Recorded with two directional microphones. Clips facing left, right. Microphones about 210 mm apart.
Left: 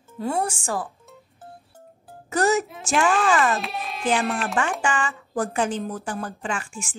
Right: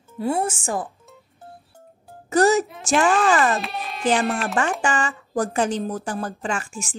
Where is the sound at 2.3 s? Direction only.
35° right (ahead or behind).